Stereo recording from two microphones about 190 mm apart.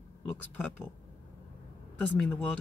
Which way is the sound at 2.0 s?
5° left (ahead or behind).